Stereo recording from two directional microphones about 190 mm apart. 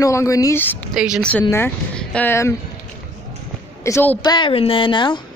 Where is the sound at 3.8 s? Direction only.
10° left (ahead or behind).